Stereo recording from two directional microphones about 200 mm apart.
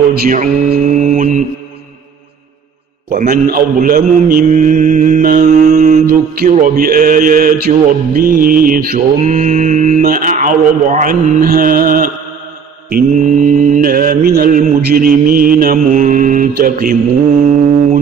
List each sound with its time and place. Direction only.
0.1 s mantra: 40° right (ahead or behind)
3.1 s mantra: 45° right (ahead or behind)
6.0 s mantra: 45° right (ahead or behind)